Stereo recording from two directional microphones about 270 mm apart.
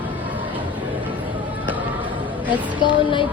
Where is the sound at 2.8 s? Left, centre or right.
Centre.